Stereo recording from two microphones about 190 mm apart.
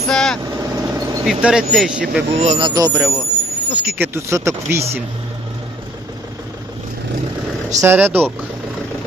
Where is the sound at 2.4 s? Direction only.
40° right (ahead or behind).